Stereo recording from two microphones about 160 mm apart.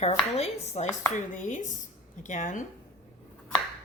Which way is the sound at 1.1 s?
50° left (ahead or behind).